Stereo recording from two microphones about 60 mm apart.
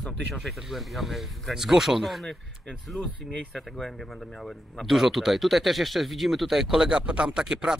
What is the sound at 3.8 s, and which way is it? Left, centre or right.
Speech, centre.